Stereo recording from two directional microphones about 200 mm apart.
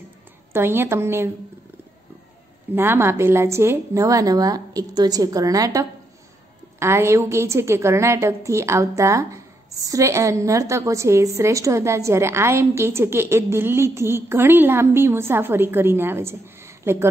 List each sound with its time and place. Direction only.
0.5 s a woman's voice: 10° right (ahead or behind)
2.7 s a woman's voice: 10° right (ahead or behind)